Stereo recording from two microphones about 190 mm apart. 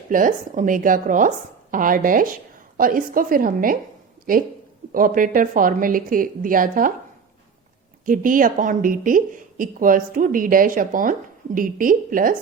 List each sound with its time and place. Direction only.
0.1 s a woman's voice: 45° right (ahead or behind)
8.0 s a woman's voice: 45° right (ahead or behind)